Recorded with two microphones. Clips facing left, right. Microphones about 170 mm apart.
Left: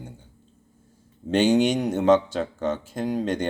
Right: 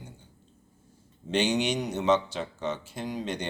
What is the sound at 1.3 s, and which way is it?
Speech, 50° left (ahead or behind).